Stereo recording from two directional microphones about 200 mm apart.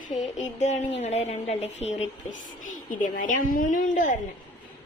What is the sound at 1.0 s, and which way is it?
A woman's voice, 30° left (ahead or behind).